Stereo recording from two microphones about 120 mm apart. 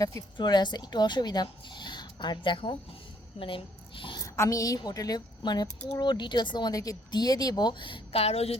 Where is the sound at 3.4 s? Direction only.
55° left (ahead or behind).